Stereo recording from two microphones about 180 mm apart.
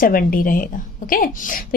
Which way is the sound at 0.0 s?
50° left (ahead or behind).